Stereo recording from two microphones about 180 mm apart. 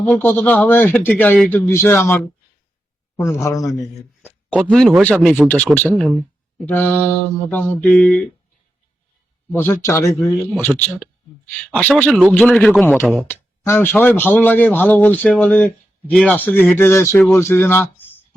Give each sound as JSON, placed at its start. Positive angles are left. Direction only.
{"t": 0.1, "sound": "speech", "side_deg": 10}
{"t": 4.3, "sound": "speech", "side_deg": -10}
{"t": 5.3, "sound": "a man's voice", "side_deg": 10}
{"t": 9.5, "sound": "speech", "side_deg": 10}
{"t": 10.6, "sound": "a man's voice", "side_deg": 5}